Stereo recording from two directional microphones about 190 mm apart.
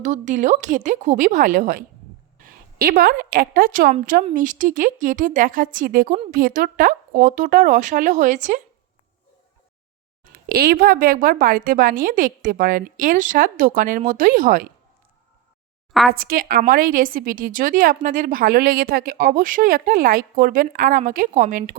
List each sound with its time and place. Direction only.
0.0 s a woman's voice: 40° right (ahead or behind)
10.3 s a woman's voice: 55° right (ahead or behind)
15.9 s speech: centre (ahead or behind)
16.1 s a woman's voice: 50° right (ahead or behind)